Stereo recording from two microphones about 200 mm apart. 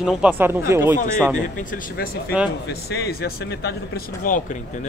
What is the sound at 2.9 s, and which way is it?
Speech, 55° left (ahead or behind).